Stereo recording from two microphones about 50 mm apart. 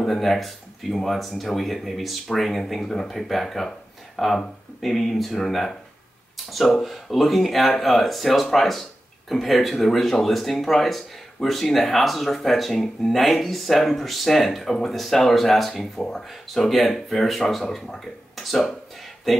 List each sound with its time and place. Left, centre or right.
0.0 s speech: centre